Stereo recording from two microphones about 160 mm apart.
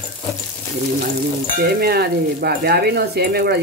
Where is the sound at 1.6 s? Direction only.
80° right.